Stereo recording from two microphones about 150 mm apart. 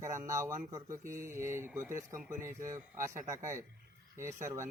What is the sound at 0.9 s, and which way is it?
Speech, 60° right (ahead or behind).